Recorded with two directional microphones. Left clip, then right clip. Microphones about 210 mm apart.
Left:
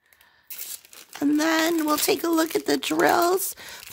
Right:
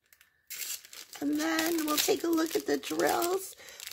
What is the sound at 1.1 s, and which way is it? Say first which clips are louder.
Speech: left 9 dB; 30° left (ahead or behind).